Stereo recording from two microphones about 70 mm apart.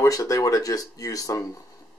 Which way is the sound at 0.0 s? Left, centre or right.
Left.